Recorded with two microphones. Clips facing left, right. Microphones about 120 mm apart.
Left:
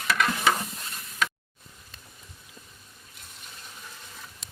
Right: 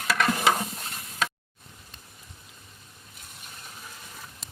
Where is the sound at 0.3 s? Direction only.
15° right (ahead or behind).